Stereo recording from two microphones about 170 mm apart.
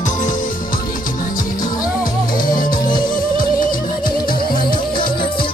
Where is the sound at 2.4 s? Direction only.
55° left (ahead or behind).